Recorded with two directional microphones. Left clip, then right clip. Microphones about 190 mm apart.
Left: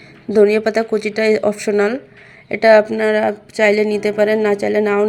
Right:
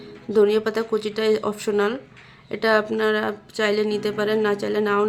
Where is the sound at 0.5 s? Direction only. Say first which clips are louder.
Left 6 dB; 20° left (ahead or behind).